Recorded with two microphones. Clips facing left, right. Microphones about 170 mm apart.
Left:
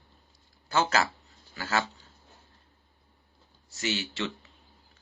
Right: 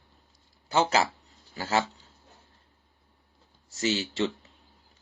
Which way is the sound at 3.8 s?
35° right (ahead or behind).